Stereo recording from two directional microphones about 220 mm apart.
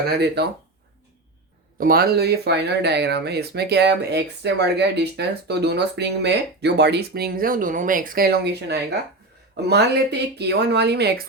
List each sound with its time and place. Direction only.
0.4 s speech: 50° right (ahead or behind)
1.8 s speech: 45° right (ahead or behind)